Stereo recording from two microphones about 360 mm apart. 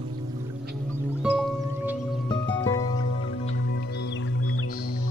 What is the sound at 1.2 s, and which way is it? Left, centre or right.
Music, centre.